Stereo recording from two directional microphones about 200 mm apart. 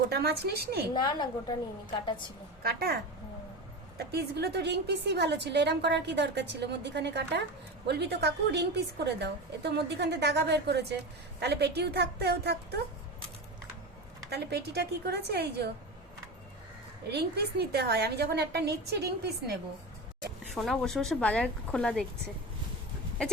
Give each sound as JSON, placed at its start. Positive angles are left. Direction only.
{"t": 0.1, "sound": "a woman's voice", "side_deg": -55}
{"t": 0.9, "sound": "a woman's voice", "side_deg": 20}
{"t": 2.6, "sound": "a woman's voice", "side_deg": -50}
{"t": 14.3, "sound": "a woman's voice", "side_deg": -55}
{"t": 17.1, "sound": "a woman's voice", "side_deg": -55}
{"t": 20.6, "sound": "a woman's voice", "side_deg": 0}